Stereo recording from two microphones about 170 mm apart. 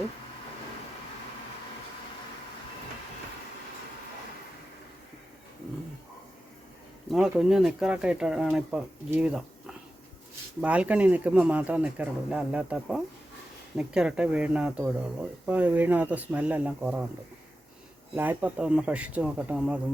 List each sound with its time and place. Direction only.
7.1 s speech: centre (ahead or behind)
18.1 s speech: 10° right (ahead or behind)